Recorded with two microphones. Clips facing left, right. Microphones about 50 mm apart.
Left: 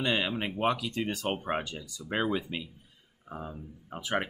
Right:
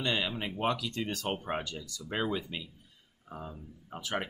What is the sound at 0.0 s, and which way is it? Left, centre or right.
Speech, centre.